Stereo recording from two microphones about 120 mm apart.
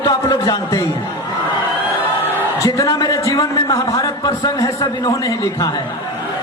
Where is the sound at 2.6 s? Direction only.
25° left (ahead or behind).